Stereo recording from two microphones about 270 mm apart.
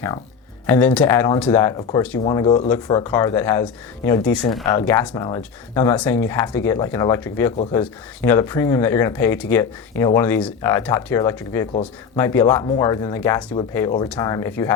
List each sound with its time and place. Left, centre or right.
0.7 s speech: centre